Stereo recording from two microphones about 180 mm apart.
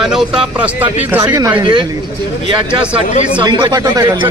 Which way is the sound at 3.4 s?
25° right (ahead or behind).